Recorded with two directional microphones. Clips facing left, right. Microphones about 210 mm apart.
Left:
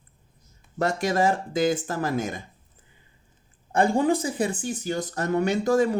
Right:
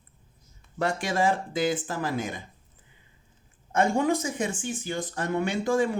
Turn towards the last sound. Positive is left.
turn(degrees=40)  # may be behind; listen again after turning